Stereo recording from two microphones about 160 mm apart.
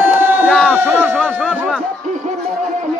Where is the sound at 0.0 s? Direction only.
15° right (ahead or behind).